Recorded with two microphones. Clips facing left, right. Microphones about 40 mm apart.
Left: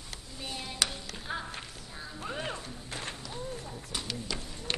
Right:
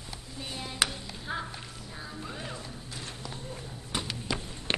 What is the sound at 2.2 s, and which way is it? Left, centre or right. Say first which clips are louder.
Music: left 6 dB; left.